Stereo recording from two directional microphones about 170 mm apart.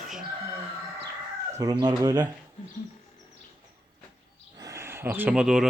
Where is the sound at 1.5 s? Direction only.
25° right (ahead or behind).